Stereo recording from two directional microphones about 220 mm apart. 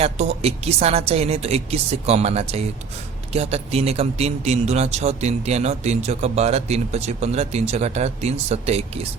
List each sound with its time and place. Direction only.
0.0 s speech: 30° right (ahead or behind)